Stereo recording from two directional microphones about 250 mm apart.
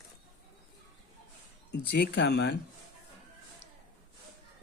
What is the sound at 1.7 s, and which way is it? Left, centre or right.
Speech, left.